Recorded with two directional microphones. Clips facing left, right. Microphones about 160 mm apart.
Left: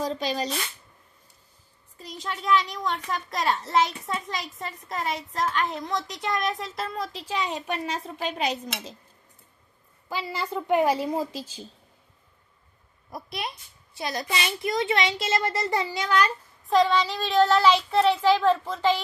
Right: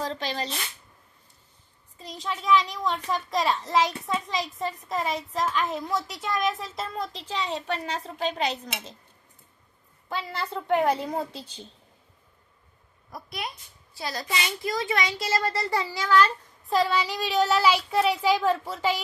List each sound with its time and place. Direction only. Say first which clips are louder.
0.0 s speech: left 3 dB; 15° left (ahead or behind)
2.0 s a woman's voice: right 1 dB; centre (ahead or behind)
4.8 s a woman's voice: left 1 dB; centre (ahead or behind)
10.3 s a woman's voice: left 2 dB; 10° left (ahead or behind)
13.1 s a child's voice: left 2 dB; 25° left (ahead or behind)
16.6 s a child's voice: left 3 dB; 5° right (ahead or behind)